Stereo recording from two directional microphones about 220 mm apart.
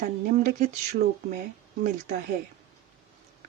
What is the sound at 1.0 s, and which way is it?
Speech, 45° right (ahead or behind).